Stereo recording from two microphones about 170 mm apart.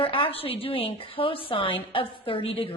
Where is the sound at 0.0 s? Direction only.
30° left (ahead or behind).